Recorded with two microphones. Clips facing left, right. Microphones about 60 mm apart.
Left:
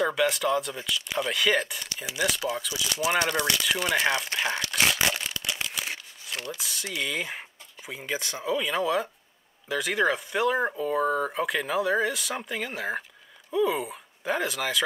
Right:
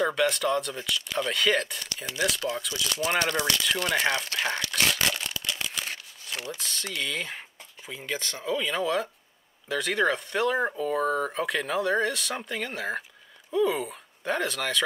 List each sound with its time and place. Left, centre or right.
0.0 s speech: centre
4.6 s speech: left
4.8 s crumpling: centre
6.5 s speech: centre